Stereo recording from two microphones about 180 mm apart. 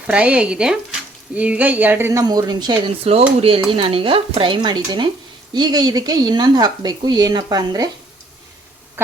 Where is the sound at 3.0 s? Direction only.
35° right (ahead or behind).